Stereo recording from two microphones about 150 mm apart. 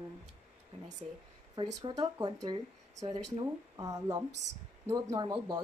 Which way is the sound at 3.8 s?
25° right (ahead or behind).